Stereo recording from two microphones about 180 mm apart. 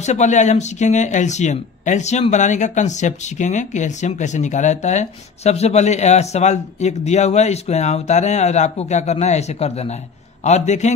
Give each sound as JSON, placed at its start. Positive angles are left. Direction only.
{"t": 0.0, "sound": "speech", "side_deg": 40}